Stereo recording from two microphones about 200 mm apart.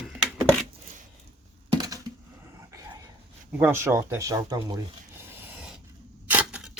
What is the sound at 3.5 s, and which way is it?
Speech, 10° right (ahead or behind).